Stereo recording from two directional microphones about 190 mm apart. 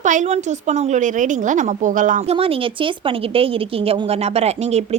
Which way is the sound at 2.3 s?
30° right (ahead or behind).